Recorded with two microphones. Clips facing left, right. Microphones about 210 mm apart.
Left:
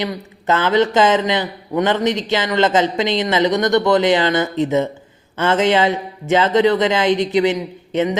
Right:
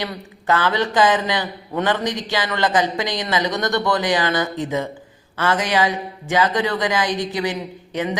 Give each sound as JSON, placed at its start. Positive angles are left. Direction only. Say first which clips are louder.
{"t": 0.0, "sound": "speech", "louder": "left 4 dB", "side_deg": 20}